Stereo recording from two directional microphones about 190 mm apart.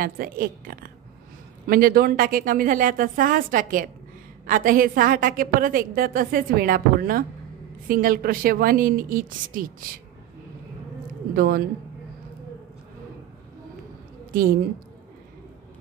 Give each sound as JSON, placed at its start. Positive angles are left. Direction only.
{"t": 0.0, "sound": "a woman's voice", "side_deg": -50}
{"t": 11.3, "sound": "a woman's voice", "side_deg": -50}
{"t": 14.3, "sound": "a woman's voice", "side_deg": -50}